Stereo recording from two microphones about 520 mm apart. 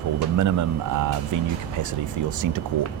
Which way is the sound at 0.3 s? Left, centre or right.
Right.